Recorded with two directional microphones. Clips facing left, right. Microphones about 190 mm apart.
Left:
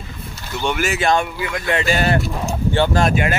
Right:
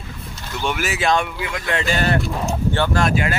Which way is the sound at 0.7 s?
Centre (ahead or behind).